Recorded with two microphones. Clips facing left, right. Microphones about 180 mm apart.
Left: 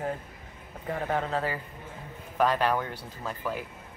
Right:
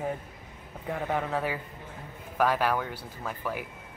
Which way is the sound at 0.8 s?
10° right (ahead or behind).